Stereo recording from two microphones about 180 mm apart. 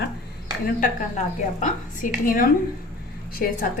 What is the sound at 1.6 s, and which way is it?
A woman's voice, 45° left (ahead or behind).